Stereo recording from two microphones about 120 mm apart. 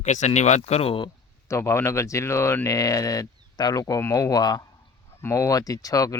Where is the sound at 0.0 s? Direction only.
75° left (ahead or behind); by 1.1 s 45° left (ahead or behind).